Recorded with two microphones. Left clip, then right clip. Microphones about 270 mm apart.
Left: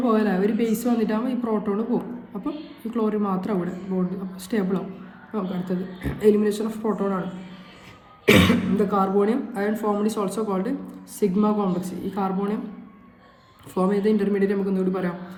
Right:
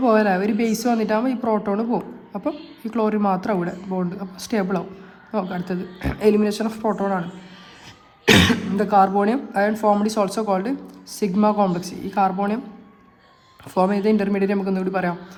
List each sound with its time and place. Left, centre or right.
0.0 s speech: right
8.3 s speech: right
13.7 s speech: right